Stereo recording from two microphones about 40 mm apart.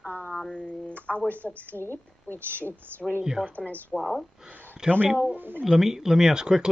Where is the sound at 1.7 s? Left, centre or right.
Left.